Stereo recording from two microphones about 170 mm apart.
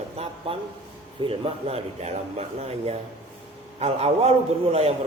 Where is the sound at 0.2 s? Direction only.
35° right (ahead or behind).